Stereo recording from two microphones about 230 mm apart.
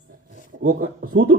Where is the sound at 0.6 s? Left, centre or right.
Right.